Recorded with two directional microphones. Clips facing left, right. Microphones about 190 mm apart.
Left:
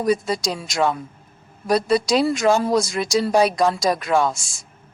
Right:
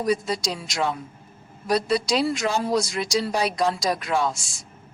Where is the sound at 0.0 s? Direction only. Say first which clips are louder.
Left 3 dB; 50° left (ahead or behind).